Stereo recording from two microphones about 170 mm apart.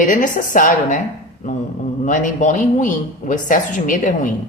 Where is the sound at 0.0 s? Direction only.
50° left (ahead or behind).